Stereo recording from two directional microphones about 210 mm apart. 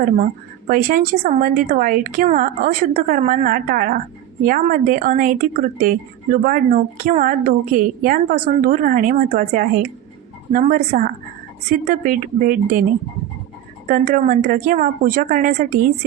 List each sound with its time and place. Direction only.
0.7 s speech: 40° right (ahead or behind)
13.8 s speech: 40° right (ahead or behind)